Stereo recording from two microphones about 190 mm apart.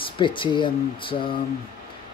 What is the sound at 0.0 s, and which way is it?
Speech, 25° left (ahead or behind).